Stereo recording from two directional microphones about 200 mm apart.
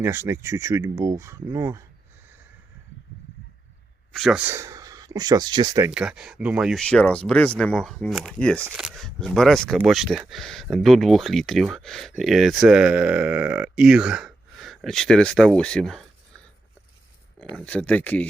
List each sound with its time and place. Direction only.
0.0 s speech: 15° right (ahead or behind)
4.1 s speech: centre (ahead or behind); by 5.9 s 20° right (ahead or behind)
5.9 s speech: 5° right (ahead or behind)
17.5 s speech: 5° left (ahead or behind)